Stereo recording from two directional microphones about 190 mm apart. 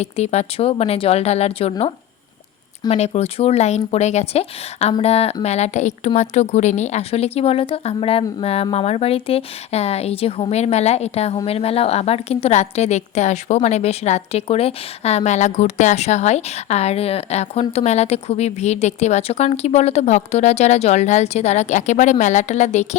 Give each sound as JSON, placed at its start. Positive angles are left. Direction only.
{"t": 0.0, "sound": "a woman's voice", "side_deg": 35}
{"t": 2.9, "sound": "a woman's voice", "side_deg": 35}